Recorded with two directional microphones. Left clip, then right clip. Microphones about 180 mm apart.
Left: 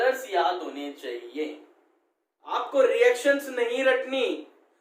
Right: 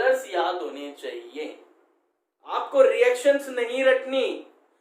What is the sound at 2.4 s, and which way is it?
Speech, 15° right (ahead or behind).